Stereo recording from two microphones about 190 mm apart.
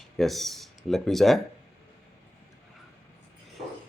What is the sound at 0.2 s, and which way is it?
Speech, centre (ahead or behind).